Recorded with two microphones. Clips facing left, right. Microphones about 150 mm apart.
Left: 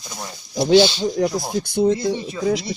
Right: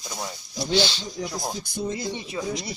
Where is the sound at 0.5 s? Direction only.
75° left (ahead or behind).